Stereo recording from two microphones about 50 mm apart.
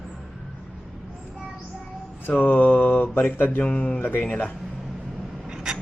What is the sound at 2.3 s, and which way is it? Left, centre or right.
A man's voice, left.